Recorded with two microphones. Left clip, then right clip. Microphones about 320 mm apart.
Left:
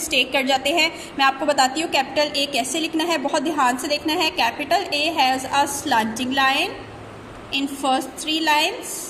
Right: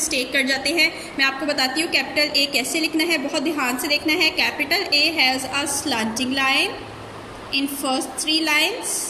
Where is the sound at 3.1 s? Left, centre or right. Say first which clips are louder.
Left 1 dB; left.